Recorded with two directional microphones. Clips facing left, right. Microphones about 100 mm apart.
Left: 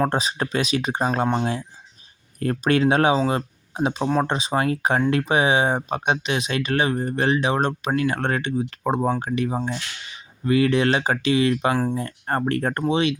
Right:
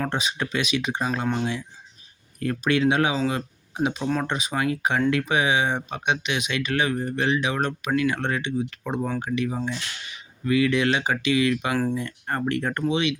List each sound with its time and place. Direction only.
0.0 s speech: 35° left (ahead or behind)
2.4 s speech: 40° left (ahead or behind)